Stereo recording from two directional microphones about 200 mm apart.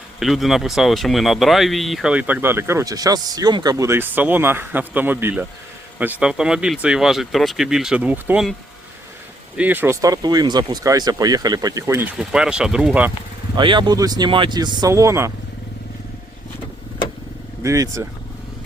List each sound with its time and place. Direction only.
0.2 s speech: centre (ahead or behind)
9.6 s speech: 10° right (ahead or behind)
12.1 s speech: 5° right (ahead or behind)
13.6 s speech: 25° right (ahead or behind)
17.6 s speech: 15° right (ahead or behind)